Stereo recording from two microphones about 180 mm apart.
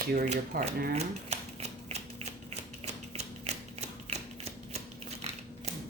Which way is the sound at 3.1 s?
35° right (ahead or behind).